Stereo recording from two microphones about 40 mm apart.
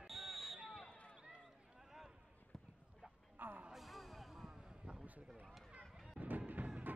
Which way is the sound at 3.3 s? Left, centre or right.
Right.